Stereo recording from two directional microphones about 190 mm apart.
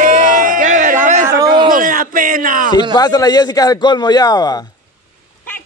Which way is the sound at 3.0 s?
20° left (ahead or behind).